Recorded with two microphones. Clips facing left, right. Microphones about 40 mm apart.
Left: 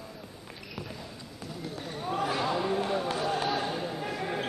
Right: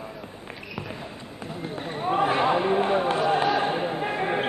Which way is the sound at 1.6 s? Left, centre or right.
Right.